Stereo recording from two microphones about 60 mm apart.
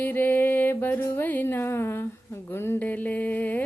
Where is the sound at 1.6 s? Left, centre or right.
Left.